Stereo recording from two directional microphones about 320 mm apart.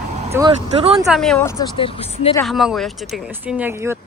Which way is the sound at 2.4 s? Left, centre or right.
Centre.